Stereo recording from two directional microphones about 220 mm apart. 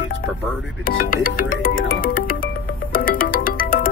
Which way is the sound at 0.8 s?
40° left (ahead or behind).